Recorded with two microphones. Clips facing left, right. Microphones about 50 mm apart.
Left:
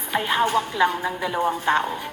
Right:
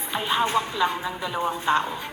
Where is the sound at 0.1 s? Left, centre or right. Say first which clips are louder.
Left 2 dB; left.